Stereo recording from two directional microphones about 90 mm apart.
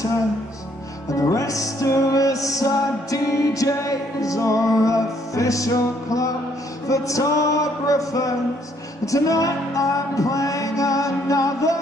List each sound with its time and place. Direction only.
1.1 s music: 40° left (ahead or behind)